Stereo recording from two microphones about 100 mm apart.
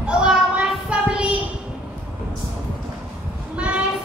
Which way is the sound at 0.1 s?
10° right (ahead or behind).